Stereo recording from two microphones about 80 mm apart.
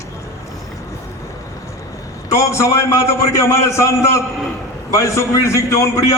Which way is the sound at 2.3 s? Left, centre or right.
Left.